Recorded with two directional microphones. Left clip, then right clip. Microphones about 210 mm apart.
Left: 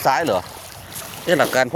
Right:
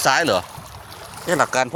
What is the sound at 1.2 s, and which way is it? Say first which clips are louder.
Speech: left 2 dB; 10° left (ahead or behind).